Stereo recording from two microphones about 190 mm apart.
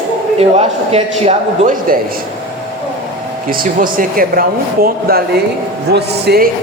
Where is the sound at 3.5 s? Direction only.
50° right (ahead or behind).